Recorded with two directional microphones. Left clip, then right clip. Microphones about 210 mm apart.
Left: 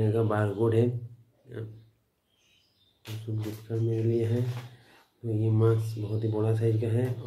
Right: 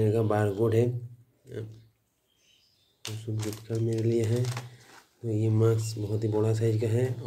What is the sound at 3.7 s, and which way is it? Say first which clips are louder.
Speech: right 1 dB; 45° right (ahead or behind).